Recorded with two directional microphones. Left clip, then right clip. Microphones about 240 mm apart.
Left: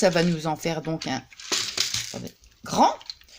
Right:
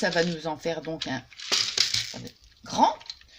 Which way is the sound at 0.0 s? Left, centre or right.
Left.